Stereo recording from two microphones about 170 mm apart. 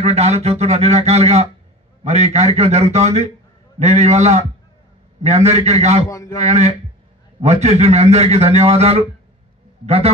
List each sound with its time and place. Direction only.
0.0 s a man's voice: 40° right (ahead or behind)
6.0 s a man's voice: 20° left (ahead or behind)
6.3 s a man's voice: 40° right (ahead or behind)